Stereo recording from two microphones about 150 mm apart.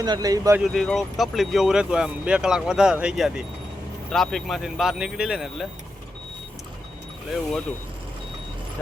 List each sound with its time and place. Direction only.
0.0 s speech: 25° right (ahead or behind)
0.6 s speech: centre (ahead or behind)